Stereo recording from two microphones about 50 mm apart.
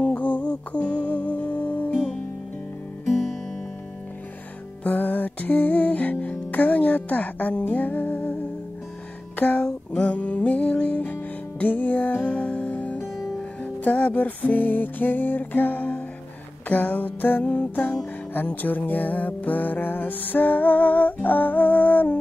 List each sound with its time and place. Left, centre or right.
0.0 s music: left
0.5 s music: left
3.1 s music: centre
4.8 s music: left
9.6 s music: centre